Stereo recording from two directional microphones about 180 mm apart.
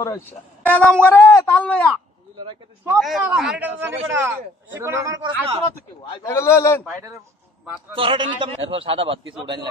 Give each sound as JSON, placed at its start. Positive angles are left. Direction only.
{"t": 0.0, "sound": "a woman's voice", "side_deg": 15}
{"t": 3.0, "sound": "a man's voice", "side_deg": 0}
{"t": 6.2, "sound": "speech", "side_deg": 15}
{"t": 7.9, "sound": "a man's voice", "side_deg": -30}